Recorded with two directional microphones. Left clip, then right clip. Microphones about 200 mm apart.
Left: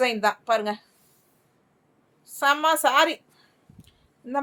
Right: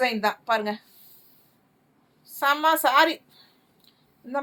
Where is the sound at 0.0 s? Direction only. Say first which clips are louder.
Left 1 dB; 25° left (ahead or behind).